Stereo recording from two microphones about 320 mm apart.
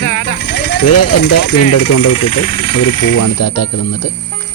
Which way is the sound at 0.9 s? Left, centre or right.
Left.